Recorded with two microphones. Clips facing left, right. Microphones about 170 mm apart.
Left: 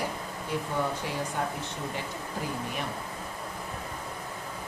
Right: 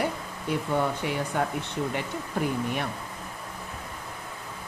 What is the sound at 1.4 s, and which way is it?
Speech, 65° right (ahead or behind).